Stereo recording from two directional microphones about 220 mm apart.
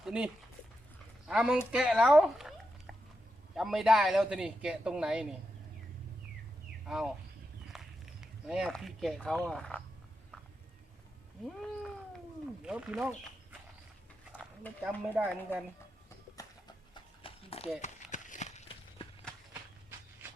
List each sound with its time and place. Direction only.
0.0 s speech: 5° right (ahead or behind)
1.3 s a man's voice: 5° right (ahead or behind)
6.8 s a man's voice: centre (ahead or behind)
7.7 s a sound: centre (ahead or behind)
9.5 s a man's voice: 5° left (ahead or behind)
11.4 s a man's voice: centre (ahead or behind)
14.8 s speech: 5° right (ahead or behind)
15.5 s speech: 10° left (ahead or behind)
16.9 s a sound: 25° left (ahead or behind)